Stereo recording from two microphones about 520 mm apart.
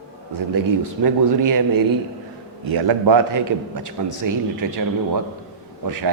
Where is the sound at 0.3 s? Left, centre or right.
Right.